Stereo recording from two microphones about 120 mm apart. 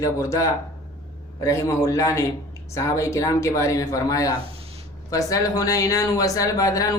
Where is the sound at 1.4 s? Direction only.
25° left (ahead or behind).